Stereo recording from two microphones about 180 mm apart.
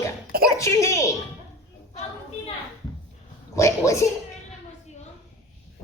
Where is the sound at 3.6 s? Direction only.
15° left (ahead or behind).